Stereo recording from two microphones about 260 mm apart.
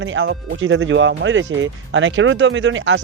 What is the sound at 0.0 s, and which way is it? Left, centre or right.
Speech, right.